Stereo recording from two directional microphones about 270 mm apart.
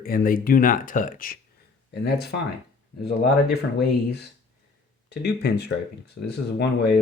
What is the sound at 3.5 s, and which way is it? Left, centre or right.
Speech, left.